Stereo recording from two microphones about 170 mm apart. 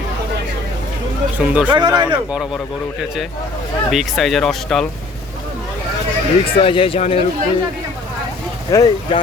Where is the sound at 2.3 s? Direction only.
Centre (ahead or behind).